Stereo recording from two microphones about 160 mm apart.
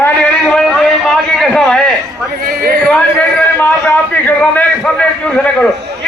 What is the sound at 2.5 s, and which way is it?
Speech, 70° right (ahead or behind).